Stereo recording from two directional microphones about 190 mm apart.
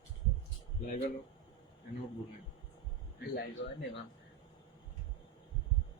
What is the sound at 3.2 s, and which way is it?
Speech, 65° left (ahead or behind).